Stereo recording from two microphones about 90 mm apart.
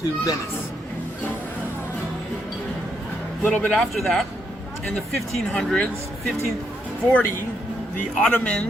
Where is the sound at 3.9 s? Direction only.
Centre (ahead or behind).